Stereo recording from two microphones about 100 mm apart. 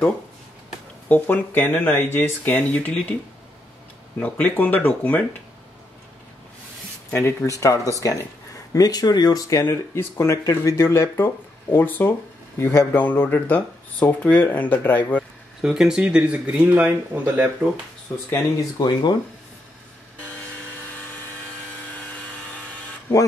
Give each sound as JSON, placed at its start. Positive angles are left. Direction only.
{"t": 1.0, "sound": "speech", "side_deg": 20}
{"t": 4.2, "sound": "speech", "side_deg": 15}
{"t": 7.1, "sound": "speech", "side_deg": 25}
{"t": 15.6, "sound": "speech", "side_deg": -5}
{"t": 18.8, "sound": "speech", "side_deg": 45}